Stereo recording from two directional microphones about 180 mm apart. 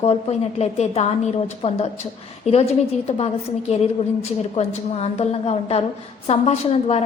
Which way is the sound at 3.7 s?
35° left (ahead or behind).